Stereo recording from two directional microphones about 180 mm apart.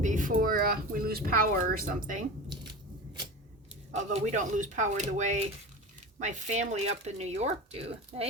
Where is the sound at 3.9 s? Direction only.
40° right (ahead or behind).